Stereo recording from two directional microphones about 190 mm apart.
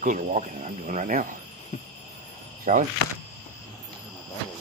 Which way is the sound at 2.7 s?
45° right (ahead or behind).